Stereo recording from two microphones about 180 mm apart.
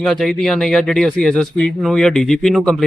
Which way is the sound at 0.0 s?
5° left (ahead or behind).